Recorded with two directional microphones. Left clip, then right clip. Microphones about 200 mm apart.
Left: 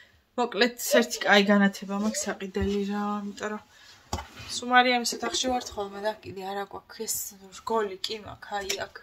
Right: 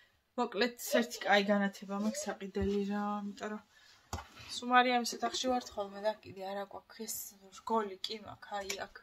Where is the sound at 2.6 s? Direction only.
5° right (ahead or behind).